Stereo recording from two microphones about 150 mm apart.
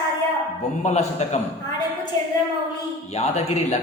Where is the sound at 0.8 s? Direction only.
50° left (ahead or behind).